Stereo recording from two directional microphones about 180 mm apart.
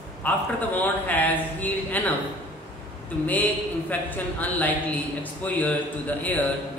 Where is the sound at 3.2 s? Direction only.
10° left (ahead or behind).